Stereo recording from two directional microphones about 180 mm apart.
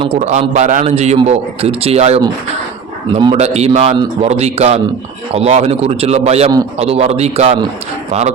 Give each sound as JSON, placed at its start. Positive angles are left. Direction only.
{"t": 0.0, "sound": "a man's voice", "side_deg": -35}
{"t": 3.1, "sound": "speech", "side_deg": -25}
{"t": 3.3, "sound": "a man's voice", "side_deg": -35}